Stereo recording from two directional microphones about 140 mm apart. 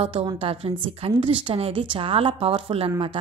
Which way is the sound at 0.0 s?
40° right (ahead or behind).